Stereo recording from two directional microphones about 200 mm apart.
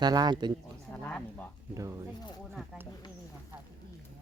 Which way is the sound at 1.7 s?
15° right (ahead or behind).